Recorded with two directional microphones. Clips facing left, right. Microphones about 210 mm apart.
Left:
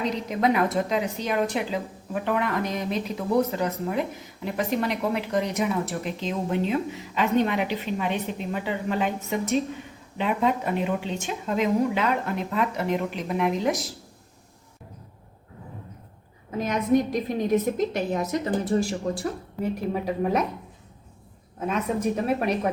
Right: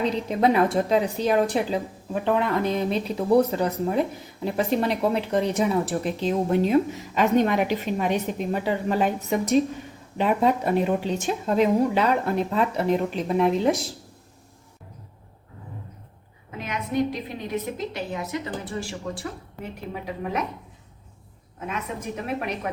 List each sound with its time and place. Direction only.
0.0 s speech: 30° right (ahead or behind)
16.5 s a woman's voice: 40° left (ahead or behind)
21.7 s a woman's voice: 35° left (ahead or behind)